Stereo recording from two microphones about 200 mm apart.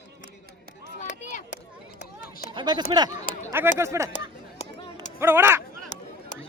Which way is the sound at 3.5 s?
10° right (ahead or behind).